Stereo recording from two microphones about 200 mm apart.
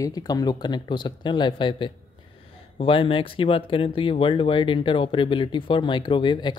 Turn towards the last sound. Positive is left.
turn(degrees=25)  # may be behind; listen again after turning